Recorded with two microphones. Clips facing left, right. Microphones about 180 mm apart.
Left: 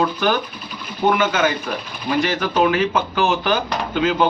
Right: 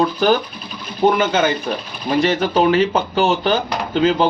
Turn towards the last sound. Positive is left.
turn(degrees=-30)  # may be behind; listen again after turning